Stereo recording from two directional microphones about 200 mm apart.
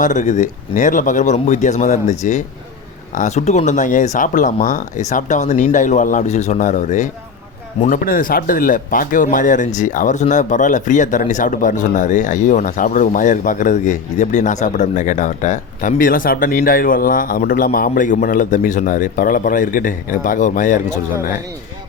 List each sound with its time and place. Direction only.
0.0 s speech: 40° left (ahead or behind)